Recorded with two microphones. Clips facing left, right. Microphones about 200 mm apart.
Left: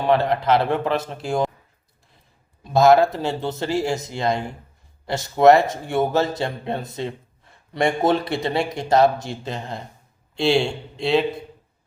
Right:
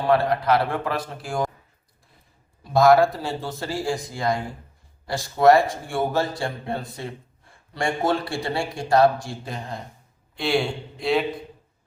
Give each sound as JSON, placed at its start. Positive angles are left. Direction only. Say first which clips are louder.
{"t": 0.0, "sound": "speech", "louder": "left 1 dB", "side_deg": 20}
{"t": 2.7, "sound": "speech", "louder": "left 1 dB", "side_deg": 25}